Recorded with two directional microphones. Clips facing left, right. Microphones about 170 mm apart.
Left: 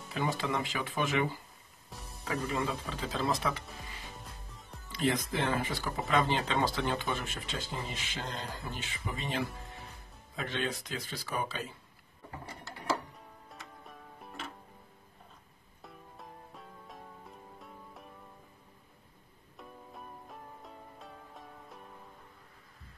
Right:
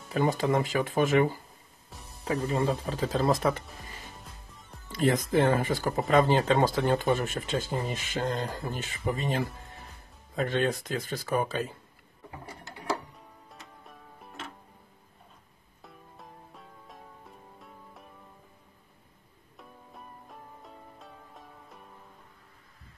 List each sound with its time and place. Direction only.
0.1 s speech: 45° right (ahead or behind)
2.2 s speech: 35° right (ahead or behind)
4.2 s music: centre (ahead or behind)
4.8 s speech: 45° right (ahead or behind)
13.5 s music: centre (ahead or behind)
15.8 s music: centre (ahead or behind)
19.5 s music: centre (ahead or behind)